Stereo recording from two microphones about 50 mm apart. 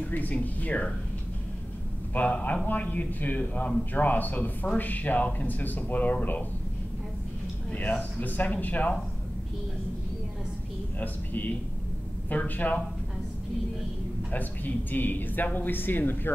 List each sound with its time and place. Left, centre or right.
0.0 s a man's voice: left
2.1 s a man's voice: left
8.0 s a man's voice: left
11.0 s a man's voice: left
14.3 s a man's voice: left